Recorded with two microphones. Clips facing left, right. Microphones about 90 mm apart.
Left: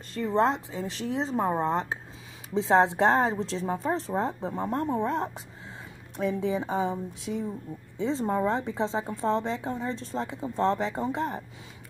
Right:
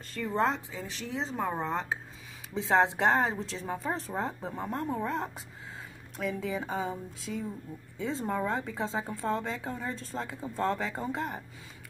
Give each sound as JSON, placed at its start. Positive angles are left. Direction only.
{"t": 0.1, "sound": "speech", "side_deg": 25}